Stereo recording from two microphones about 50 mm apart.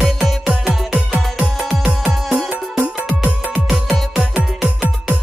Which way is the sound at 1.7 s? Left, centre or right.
Centre.